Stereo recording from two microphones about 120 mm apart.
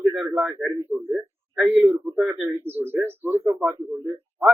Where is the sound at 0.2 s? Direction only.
15° right (ahead or behind).